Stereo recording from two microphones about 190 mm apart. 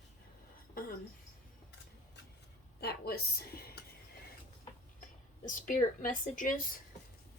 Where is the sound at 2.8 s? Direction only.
55° left (ahead or behind).